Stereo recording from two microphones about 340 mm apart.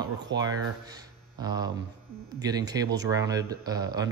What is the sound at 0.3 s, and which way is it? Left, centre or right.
Speech, right.